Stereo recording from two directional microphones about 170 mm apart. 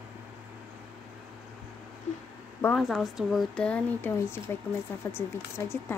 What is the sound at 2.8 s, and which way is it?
Child singing, centre (ahead or behind).